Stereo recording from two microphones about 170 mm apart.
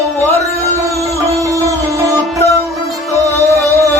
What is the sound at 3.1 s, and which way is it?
Music, 20° right (ahead or behind).